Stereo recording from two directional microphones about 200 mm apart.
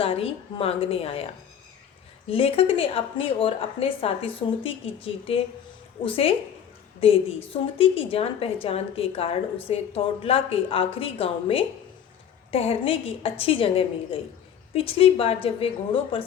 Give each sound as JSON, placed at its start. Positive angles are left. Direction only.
{"t": 0.0, "sound": "a woman's voice", "side_deg": 30}
{"t": 2.3, "sound": "a woman's voice", "side_deg": 30}